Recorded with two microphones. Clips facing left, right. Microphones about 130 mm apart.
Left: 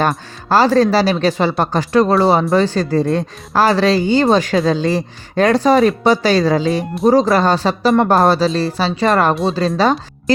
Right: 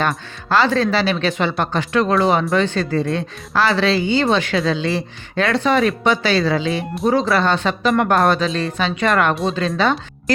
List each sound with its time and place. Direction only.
0.4 s speech: 40° left (ahead or behind)